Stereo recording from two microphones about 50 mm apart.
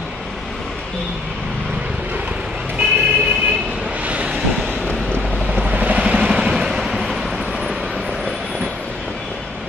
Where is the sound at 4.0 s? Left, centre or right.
Right.